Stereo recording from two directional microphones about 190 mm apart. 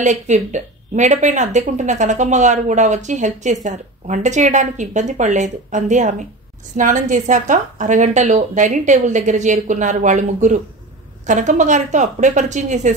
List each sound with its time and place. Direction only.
0.0 s speech: 40° right (ahead or behind)